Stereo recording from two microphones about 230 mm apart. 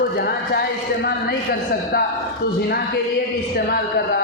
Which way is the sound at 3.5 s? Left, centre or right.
Left.